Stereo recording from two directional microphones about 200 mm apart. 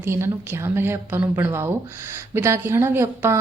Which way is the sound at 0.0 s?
15° right (ahead or behind).